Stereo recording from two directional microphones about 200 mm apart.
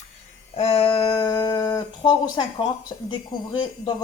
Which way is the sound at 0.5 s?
30° left (ahead or behind).